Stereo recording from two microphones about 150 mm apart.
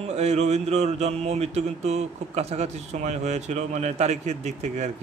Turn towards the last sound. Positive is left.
turn(degrees=-50)  # may be behind; listen again after turning